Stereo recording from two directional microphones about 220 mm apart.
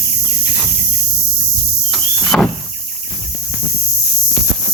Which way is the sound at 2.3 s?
5° left (ahead or behind).